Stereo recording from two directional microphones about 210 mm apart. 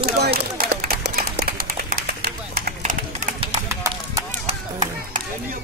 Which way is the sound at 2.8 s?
40° right (ahead or behind).